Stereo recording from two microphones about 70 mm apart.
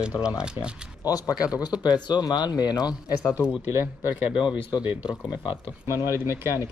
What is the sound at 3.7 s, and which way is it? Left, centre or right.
Speech, right.